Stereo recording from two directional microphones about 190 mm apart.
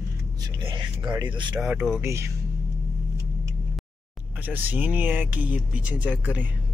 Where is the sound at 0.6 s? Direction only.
20° right (ahead or behind).